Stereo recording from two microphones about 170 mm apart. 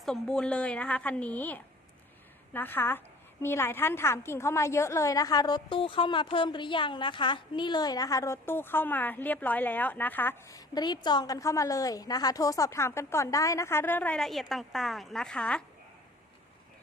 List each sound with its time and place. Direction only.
0.0 s a woman's voice: 5° left (ahead or behind)
10.8 s a woman's voice: 25° left (ahead or behind); by 15.6 s 5° left (ahead or behind)